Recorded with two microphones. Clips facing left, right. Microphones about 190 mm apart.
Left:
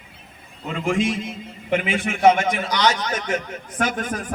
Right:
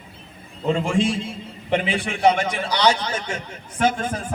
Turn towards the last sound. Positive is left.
turn(degrees=-25)  # may be behind; listen again after turning